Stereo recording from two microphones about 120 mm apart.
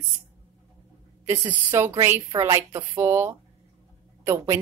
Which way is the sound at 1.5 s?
20° right (ahead or behind).